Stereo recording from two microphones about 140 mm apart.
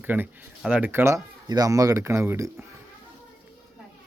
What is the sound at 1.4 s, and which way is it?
Speech, 30° right (ahead or behind).